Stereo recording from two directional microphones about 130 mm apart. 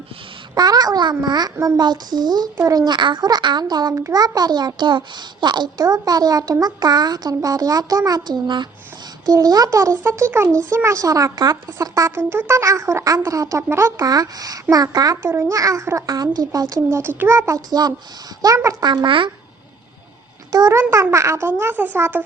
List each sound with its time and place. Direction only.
0.5 s a child's voice: 30° right (ahead or behind)
15.2 s a child's voice: 20° right (ahead or behind); by 19.3 s 40° right (ahead or behind)
20.5 s speech: 25° right (ahead or behind)